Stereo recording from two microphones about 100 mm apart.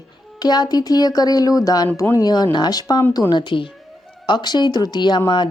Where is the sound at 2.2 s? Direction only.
45° left (ahead or behind).